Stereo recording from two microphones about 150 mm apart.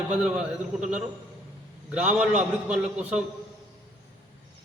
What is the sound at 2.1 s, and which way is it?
A man's voice, 5° right (ahead or behind).